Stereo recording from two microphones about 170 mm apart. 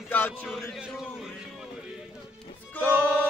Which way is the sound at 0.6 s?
Centre (ahead or behind).